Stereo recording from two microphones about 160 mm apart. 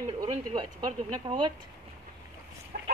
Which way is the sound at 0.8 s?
25° right (ahead or behind).